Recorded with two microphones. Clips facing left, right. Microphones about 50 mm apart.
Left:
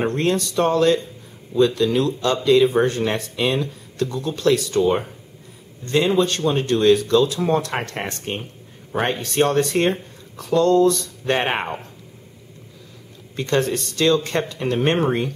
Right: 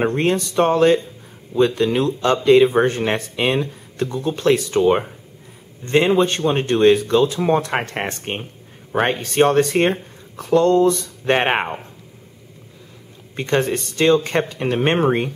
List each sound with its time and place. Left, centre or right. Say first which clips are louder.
0.0 s speech: right 2 dB; right
11.6 s speech: right 1 dB; centre
13.4 s speech: right 1 dB; right